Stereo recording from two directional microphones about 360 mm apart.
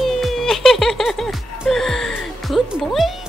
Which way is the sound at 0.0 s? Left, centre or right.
Centre.